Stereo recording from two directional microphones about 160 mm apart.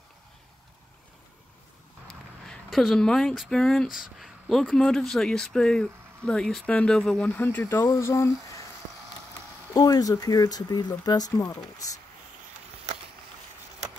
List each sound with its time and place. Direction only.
2.0 s speech: centre (ahead or behind); by 8.6 s 15° left (ahead or behind)
9.8 s speech: 25° left (ahead or behind)